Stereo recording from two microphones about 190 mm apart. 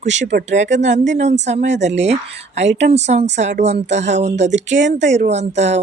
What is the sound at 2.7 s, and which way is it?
Speech, 65° right (ahead or behind).